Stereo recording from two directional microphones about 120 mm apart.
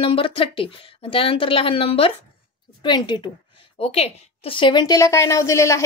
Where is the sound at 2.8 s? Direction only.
35° left (ahead or behind).